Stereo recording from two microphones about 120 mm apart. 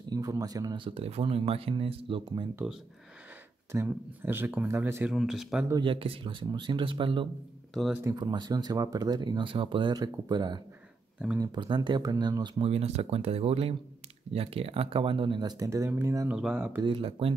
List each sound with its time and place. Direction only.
0.1 s speech: 30° right (ahead or behind)
0.7 s speech: 50° right (ahead or behind)
3.7 s speech: 20° right (ahead or behind)
5.1 s speech: centre (ahead or behind)
5.8 s speech: 45° right (ahead or behind)
8.0 s speech: 30° right (ahead or behind)
12.5 s speech: 60° right (ahead or behind); by 16.3 s 25° right (ahead or behind)
16.3 s speech: 10° right (ahead or behind)
16.8 s speech: 50° right (ahead or behind)